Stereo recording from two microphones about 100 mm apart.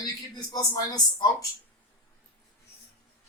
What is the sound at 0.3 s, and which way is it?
Speech, 40° left (ahead or behind).